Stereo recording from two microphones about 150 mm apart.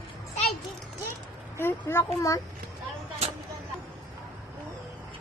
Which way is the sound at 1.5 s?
15° left (ahead or behind).